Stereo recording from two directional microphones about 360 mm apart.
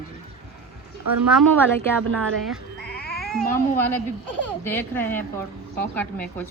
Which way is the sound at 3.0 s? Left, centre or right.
Left.